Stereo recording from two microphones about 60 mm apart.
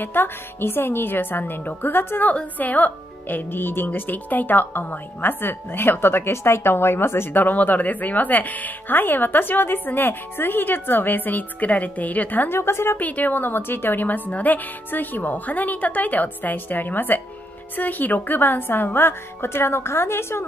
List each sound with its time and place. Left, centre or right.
0.0 s speech: left
12.5 s a woman's voice: left
13.0 s a woman's voice: left